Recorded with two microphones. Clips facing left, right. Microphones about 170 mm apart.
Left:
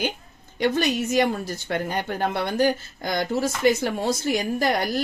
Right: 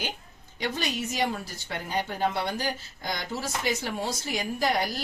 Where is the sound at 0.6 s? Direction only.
55° left (ahead or behind).